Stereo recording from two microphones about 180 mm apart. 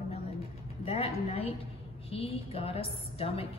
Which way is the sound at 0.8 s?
35° left (ahead or behind).